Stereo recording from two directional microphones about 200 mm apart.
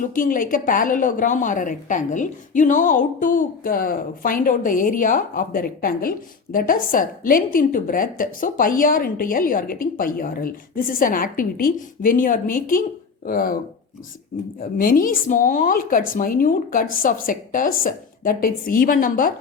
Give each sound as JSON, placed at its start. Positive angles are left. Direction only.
{"t": 0.1, "sound": "a woman's voice", "side_deg": 40}
{"t": 14.6, "sound": "a woman's voice", "side_deg": 45}